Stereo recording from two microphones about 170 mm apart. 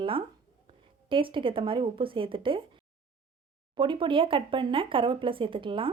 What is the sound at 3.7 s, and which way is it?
Speech, 30° right (ahead or behind).